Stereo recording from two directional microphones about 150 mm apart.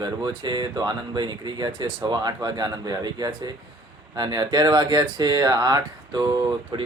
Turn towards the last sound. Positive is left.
turn(degrees=-35)  # may be behind; listen again after turning